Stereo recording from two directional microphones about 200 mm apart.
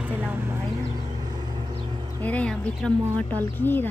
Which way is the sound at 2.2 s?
5° left (ahead or behind).